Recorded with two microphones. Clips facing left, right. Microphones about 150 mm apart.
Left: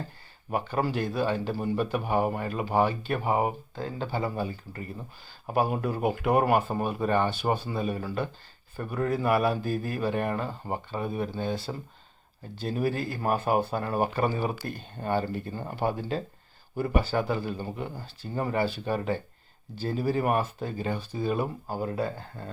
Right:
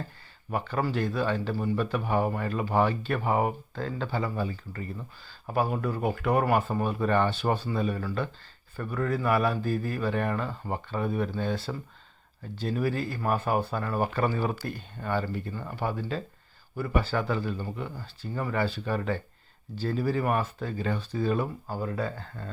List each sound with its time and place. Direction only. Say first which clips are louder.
0.5 s speech: left 1 dB; 15° left (ahead or behind)
4.4 s speech: even; 25° left (ahead or behind)
5.5 s speech: left 1 dB; 15° left (ahead or behind)
12.6 s speech: even; 15° left (ahead or behind)